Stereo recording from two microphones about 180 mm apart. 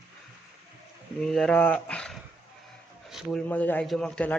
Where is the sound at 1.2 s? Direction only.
5° left (ahead or behind).